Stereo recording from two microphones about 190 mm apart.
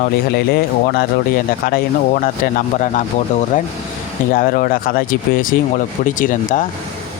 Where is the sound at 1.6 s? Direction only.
50° left (ahead or behind).